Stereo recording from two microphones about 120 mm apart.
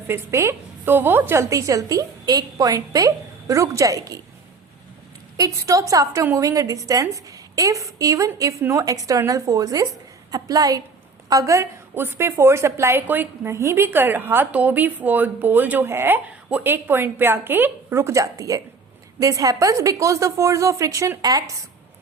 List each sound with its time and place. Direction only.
0.1 s a woman's voice: 20° right (ahead or behind)
5.4 s a woman's voice: 25° right (ahead or behind)